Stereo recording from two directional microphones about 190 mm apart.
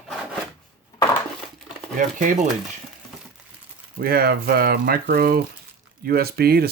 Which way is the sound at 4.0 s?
50° right (ahead or behind).